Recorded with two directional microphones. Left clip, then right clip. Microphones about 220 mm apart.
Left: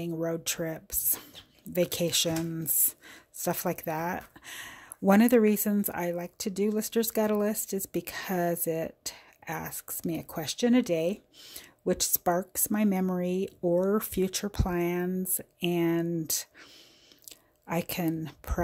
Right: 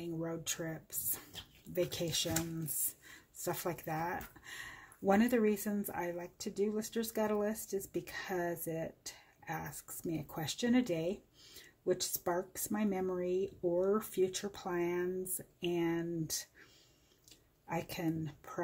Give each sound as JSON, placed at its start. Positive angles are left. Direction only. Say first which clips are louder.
{"t": 0.0, "sound": "speech", "louder": "left 9 dB", "side_deg": 45}
{"t": 17.6, "sound": "speech", "louder": "left 7 dB", "side_deg": 50}